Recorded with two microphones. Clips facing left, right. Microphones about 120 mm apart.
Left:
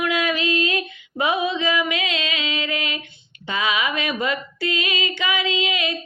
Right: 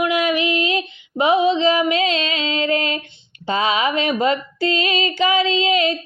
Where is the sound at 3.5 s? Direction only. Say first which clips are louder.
Right 5 dB; 35° right (ahead or behind).